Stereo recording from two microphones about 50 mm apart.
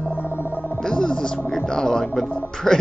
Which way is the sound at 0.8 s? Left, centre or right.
Centre.